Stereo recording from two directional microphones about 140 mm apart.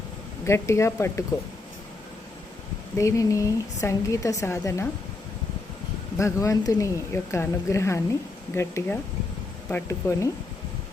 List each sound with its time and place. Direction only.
0.4 s speech: 20° left (ahead or behind)
3.0 s speech: 20° left (ahead or behind)
6.1 s speech: 20° left (ahead or behind)